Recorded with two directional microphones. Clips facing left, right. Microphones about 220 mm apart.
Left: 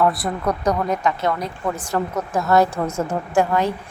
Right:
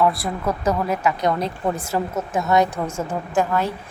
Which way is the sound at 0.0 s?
Centre (ahead or behind).